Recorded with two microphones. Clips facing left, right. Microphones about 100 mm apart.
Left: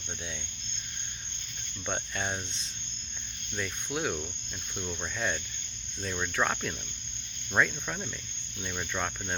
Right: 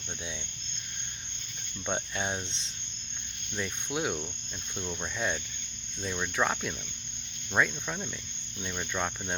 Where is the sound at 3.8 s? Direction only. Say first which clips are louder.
Even; 15° right (ahead or behind).